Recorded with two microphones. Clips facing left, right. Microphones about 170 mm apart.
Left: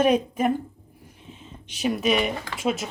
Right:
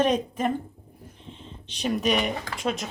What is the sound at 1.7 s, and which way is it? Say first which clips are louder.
Speech: left 2 dB; 5° left (ahead or behind).